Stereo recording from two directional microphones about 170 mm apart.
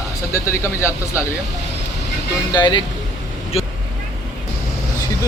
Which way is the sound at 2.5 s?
25° left (ahead or behind).